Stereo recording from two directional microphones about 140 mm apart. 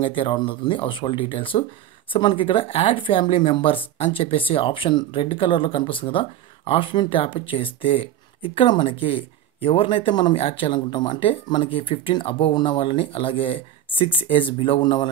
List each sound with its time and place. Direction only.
0.0 s speech: 40° left (ahead or behind)